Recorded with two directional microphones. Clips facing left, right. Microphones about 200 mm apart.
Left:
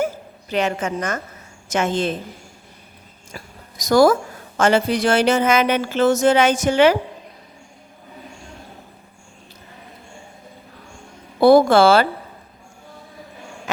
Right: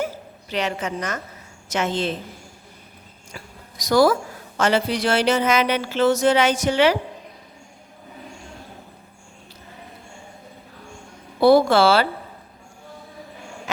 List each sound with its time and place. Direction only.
0.5 s a woman's voice: 50° left (ahead or behind)
3.3 s a woman's voice: 45° left (ahead or behind)
11.3 s a woman's voice: 50° left (ahead or behind)